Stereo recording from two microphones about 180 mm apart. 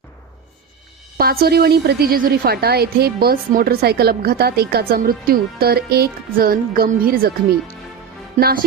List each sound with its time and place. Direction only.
1.2 s a woman's voice: 55° right (ahead or behind)
8.4 s speech: 40° right (ahead or behind)